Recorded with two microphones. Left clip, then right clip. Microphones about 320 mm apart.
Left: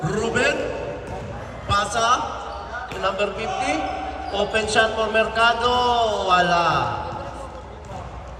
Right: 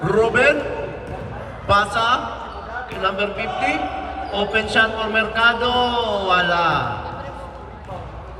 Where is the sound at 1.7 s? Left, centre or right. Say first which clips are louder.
Right 4 dB; centre.